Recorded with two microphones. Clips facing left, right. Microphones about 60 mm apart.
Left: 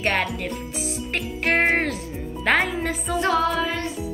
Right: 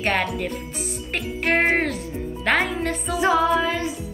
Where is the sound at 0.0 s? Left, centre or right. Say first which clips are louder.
Right 1 dB; centre.